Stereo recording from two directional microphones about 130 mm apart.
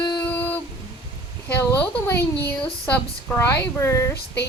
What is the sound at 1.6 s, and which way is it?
A woman's voice, 20° left (ahead or behind).